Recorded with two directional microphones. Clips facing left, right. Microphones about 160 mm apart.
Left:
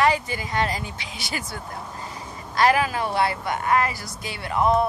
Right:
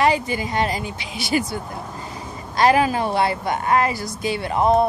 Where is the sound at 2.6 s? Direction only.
25° right (ahead or behind).